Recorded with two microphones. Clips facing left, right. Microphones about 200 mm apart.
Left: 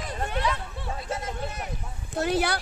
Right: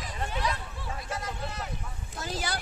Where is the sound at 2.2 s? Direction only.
65° left (ahead or behind).